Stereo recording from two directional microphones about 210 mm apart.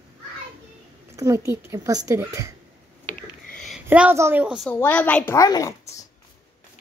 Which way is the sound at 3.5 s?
Centre (ahead or behind).